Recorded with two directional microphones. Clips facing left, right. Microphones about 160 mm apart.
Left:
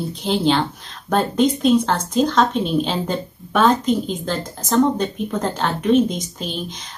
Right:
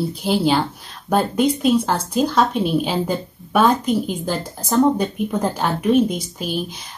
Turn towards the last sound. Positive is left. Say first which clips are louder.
# right 3 dB
turn(degrees=-10)  # may be behind; listen again after turning